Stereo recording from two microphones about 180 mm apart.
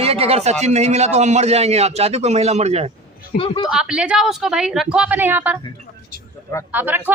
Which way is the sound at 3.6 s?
5° right (ahead or behind).